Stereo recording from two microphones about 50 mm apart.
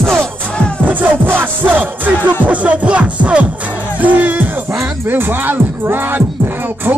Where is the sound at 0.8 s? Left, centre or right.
Right.